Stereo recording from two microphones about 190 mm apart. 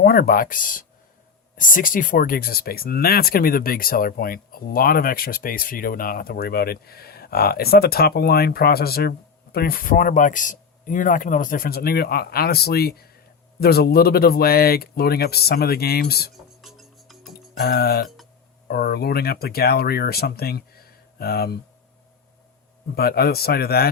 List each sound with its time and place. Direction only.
0.0 s speech: 50° left (ahead or behind)
16.6 s music: centre (ahead or behind)
17.6 s speech: 55° left (ahead or behind)
23.0 s speech: 55° left (ahead or behind)